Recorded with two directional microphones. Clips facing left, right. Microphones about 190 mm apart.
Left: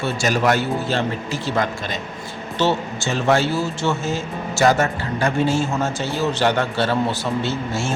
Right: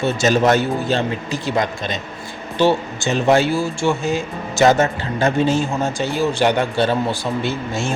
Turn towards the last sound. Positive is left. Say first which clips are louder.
# right 1 dB
turn(degrees=-15)  # may be behind; listen again after turning